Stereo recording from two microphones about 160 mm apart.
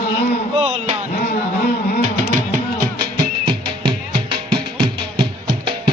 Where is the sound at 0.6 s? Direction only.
40° right (ahead or behind).